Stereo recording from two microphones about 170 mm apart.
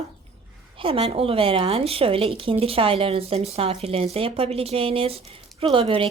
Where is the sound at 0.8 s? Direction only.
35° right (ahead or behind).